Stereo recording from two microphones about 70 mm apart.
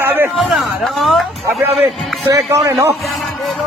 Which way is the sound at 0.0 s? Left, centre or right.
Right.